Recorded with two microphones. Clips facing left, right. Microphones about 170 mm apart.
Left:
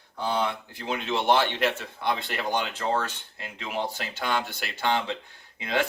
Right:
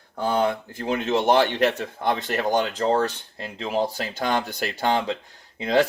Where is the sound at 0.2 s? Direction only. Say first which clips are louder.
Right 5 dB; 45° right (ahead or behind).